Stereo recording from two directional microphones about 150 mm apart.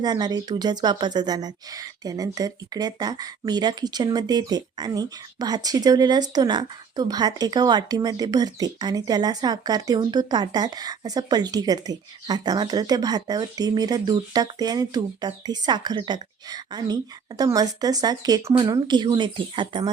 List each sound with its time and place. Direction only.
0.0 s a woman's voice: 30° right (ahead or behind)